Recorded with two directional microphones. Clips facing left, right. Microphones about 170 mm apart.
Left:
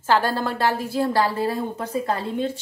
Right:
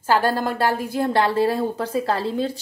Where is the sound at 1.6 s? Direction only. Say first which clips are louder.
Right 3 dB; 30° right (ahead or behind).